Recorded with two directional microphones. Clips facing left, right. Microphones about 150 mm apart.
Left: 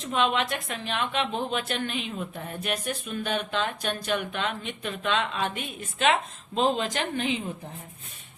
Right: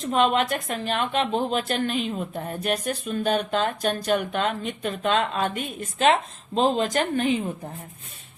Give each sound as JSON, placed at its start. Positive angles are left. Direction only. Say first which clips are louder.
{"t": 0.0, "sound": "speech", "louder": "right 4 dB", "side_deg": -40}